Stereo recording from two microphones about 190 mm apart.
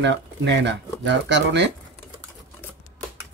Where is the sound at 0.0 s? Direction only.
70° right (ahead or behind).